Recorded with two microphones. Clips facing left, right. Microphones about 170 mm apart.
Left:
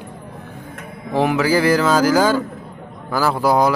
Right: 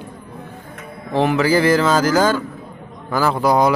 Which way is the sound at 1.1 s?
10° left (ahead or behind).